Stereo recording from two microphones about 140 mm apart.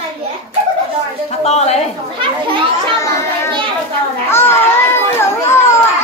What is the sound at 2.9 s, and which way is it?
A child's voice, 20° left (ahead or behind).